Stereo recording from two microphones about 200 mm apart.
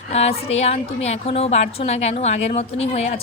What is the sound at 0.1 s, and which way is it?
A woman's voice, 30° left (ahead or behind).